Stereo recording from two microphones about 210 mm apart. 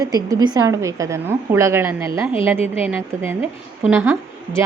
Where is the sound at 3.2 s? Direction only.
10° right (ahead or behind).